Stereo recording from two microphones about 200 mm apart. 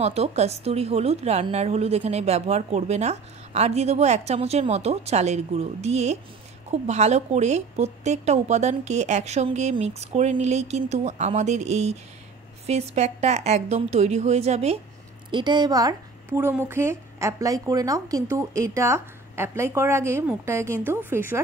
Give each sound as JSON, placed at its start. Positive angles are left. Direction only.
{"t": 0.0, "sound": "a woman's voice", "side_deg": -30}